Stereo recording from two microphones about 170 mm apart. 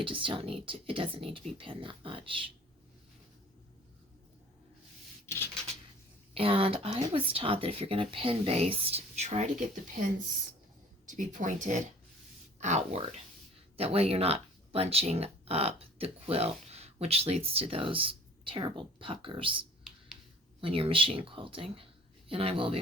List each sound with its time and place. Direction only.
0.0 s speech: 30° right (ahead or behind)
5.2 s a sound: 15° left (ahead or behind)
6.3 s speech: 35° right (ahead or behind)
11.0 s speech: 50° right (ahead or behind); by 22.8 s 35° right (ahead or behind)